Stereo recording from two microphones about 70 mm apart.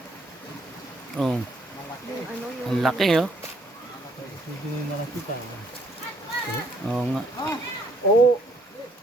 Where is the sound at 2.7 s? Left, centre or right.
Centre.